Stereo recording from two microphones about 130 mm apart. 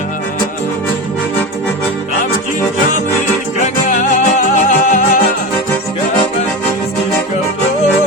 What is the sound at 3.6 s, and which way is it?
Music, 75° left (ahead or behind).